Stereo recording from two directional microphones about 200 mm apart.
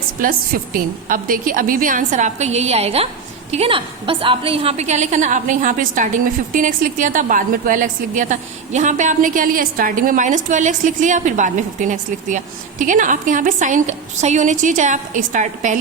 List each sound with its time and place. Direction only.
0.2 s a woman's voice: 45° right (ahead or behind)